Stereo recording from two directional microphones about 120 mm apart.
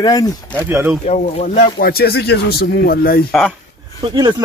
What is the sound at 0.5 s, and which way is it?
Speech, 15° right (ahead or behind).